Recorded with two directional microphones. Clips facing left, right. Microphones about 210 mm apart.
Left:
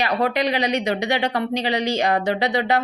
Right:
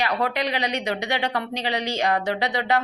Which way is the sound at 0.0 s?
15° left (ahead or behind).